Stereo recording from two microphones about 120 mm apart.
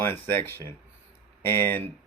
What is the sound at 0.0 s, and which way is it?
Speech, 20° left (ahead or behind).